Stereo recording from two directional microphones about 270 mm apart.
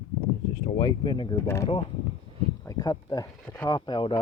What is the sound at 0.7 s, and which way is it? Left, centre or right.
Speech, centre.